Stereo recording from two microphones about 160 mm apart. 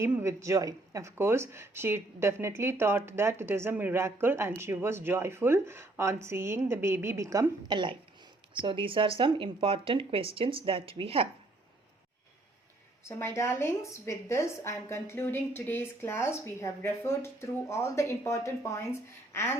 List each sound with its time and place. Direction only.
0.0 s speech: 15° right (ahead or behind); by 11.3 s 35° right (ahead or behind)
13.1 s a woman's voice: 15° left (ahead or behind)